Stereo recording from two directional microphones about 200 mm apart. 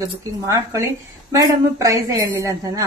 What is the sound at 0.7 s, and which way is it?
A woman's voice, 15° right (ahead or behind).